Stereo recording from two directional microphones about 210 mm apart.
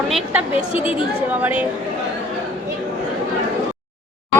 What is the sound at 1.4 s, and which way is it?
Speech, 5° right (ahead or behind).